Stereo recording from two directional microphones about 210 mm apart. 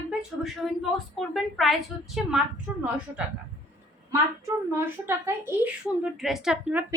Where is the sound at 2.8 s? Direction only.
5° right (ahead or behind).